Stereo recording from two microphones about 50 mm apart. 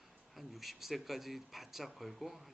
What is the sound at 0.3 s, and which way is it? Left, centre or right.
A man's voice, centre.